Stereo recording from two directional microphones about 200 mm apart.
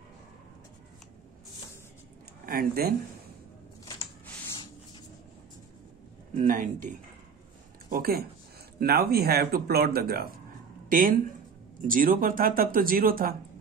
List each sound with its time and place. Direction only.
2.4 s speech: 50° right (ahead or behind)
6.3 s speech: 40° right (ahead or behind)